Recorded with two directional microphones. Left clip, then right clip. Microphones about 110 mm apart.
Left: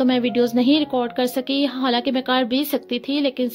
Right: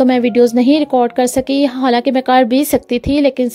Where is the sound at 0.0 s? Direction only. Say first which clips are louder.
Right 8 dB; 60° right (ahead or behind).